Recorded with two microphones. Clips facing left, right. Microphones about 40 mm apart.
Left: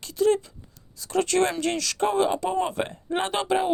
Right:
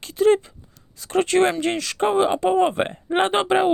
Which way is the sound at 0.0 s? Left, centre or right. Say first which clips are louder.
Right 5 dB; right.